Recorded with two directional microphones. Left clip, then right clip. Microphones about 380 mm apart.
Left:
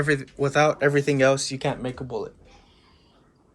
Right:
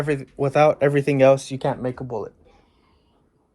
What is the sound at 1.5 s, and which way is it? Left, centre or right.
Speech, right.